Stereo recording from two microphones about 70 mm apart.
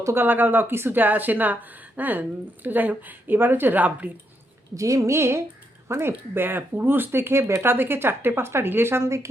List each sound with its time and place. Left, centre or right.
0.0 s speech: right
4.7 s speech: right